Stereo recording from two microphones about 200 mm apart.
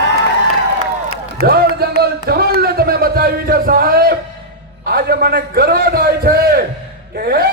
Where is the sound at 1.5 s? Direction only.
50° right (ahead or behind).